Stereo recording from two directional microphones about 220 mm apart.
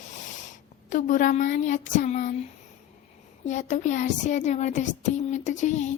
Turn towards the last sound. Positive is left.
turn(degrees=30)  # may be behind; listen again after turning